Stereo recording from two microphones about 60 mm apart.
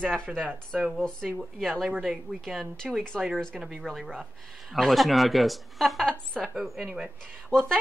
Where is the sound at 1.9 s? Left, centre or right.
Centre.